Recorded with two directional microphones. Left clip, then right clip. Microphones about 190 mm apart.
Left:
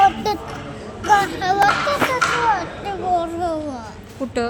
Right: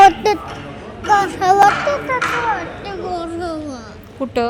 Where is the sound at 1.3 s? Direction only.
45° right (ahead or behind).